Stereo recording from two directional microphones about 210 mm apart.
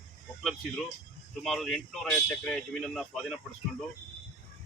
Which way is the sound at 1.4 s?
Centre (ahead or behind).